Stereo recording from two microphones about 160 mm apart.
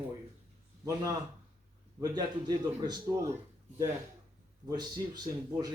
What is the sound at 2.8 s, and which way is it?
Speech, 25° right (ahead or behind).